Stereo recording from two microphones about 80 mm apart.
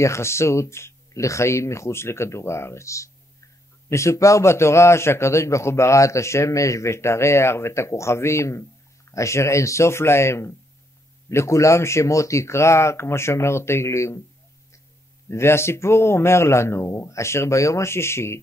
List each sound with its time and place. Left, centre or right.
0.0 s a man's voice: left
15.2 s a man's voice: left